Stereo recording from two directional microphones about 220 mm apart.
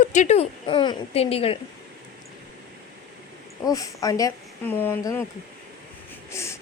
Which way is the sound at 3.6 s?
15° left (ahead or behind).